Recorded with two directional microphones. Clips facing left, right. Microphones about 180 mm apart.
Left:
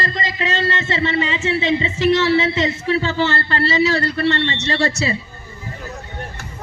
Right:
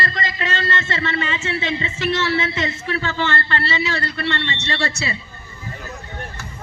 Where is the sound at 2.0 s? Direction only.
35° left (ahead or behind).